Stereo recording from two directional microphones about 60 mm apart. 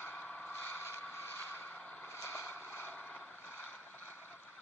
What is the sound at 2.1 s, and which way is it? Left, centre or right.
Vehicle, left.